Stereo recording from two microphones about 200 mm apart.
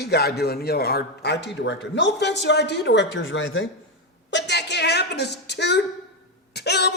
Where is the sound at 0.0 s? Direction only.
55° left (ahead or behind); by 3.7 s 70° left (ahead or behind).